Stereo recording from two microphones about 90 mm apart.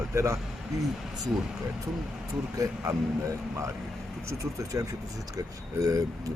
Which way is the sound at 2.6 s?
35° right (ahead or behind).